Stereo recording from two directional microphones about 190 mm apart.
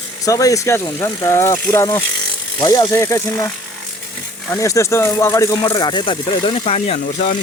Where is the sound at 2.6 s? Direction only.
25° left (ahead or behind).